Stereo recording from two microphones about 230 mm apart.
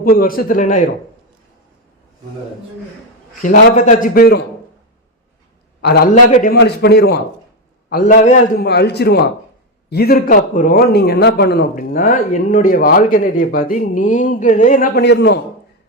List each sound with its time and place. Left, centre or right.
0.0 s a man's voice: left
3.4 s a man's voice: left
5.8 s a man's voice: left